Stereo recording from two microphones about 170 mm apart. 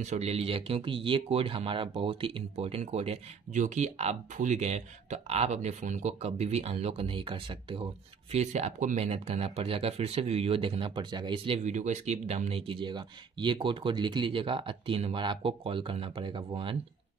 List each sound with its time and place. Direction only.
0.0 s speech: 40° right (ahead or behind)